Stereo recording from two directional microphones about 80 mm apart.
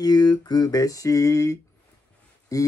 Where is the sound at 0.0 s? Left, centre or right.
Left.